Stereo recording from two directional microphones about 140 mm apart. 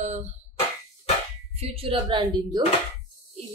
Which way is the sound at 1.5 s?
45° right (ahead or behind).